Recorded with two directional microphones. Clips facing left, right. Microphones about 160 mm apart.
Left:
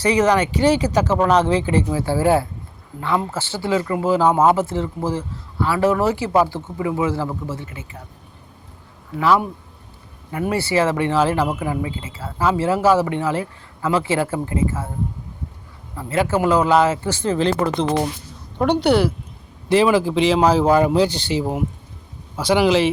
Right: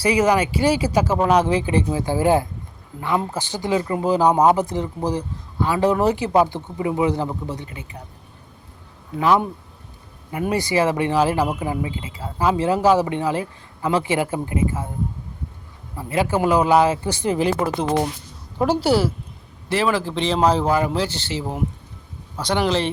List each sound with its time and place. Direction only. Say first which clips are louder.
0.0 s speech: left 1 dB; 10° right (ahead or behind)
9.1 s speech: even; 20° right (ahead or behind)
10.5 s speech: left 1 dB; 15° right (ahead or behind)
16.0 s a woman's voice: left 1 dB; 15° right (ahead or behind)
19.6 s speech: left 5 dB; 15° left (ahead or behind)
20.7 s speech: left 5 dB; 15° left (ahead or behind)